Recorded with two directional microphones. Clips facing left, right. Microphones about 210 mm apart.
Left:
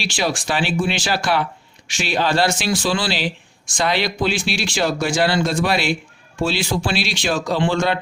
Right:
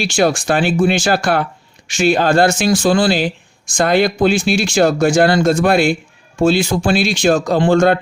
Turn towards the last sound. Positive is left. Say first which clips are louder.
# right 7 dB
turn(degrees=-50)  # may be behind; listen again after turning